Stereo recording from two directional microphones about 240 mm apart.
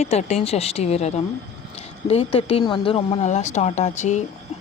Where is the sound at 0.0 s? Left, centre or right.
Left.